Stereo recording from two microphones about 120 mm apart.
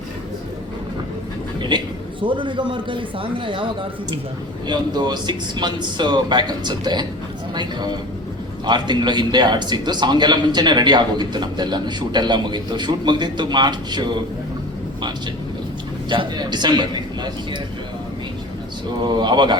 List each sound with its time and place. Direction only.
1.5 s a sound: 40° right (ahead or behind)
2.2 s a man's voice: 45° right (ahead or behind)
16.0 s a man's voice: 40° right (ahead or behind)
19.0 s a man's voice: 40° right (ahead or behind)